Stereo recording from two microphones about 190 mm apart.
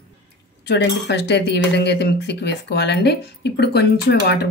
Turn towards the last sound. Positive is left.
turn(degrees=60)  # may be behind; listen again after turning